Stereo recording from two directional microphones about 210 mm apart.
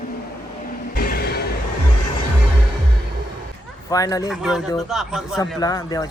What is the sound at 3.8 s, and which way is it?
Speech, 15° left (ahead or behind).